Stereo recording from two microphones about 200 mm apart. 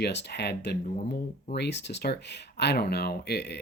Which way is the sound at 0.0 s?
55° left (ahead or behind).